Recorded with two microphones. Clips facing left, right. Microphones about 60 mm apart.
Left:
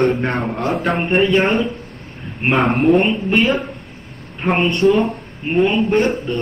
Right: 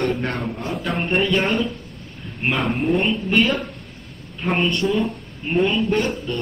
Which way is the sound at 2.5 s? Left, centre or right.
Left.